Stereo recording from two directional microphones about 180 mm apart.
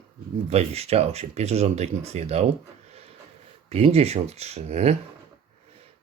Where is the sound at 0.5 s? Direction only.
35° right (ahead or behind).